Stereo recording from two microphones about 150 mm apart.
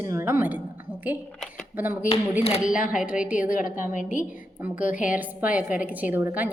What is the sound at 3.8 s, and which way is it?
A woman's voice, 55° left (ahead or behind).